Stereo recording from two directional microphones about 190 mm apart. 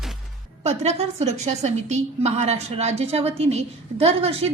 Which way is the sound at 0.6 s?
35° right (ahead or behind).